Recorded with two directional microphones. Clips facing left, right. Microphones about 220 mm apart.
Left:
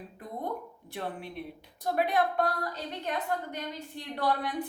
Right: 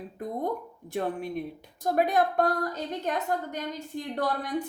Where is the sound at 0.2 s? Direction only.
45° right (ahead or behind).